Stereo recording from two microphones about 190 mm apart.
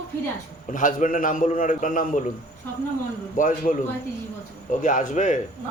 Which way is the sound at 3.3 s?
45° left (ahead or behind).